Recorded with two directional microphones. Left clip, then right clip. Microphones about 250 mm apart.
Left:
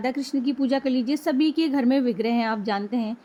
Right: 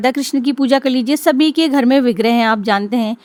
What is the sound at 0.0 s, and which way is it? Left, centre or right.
A woman's voice, right.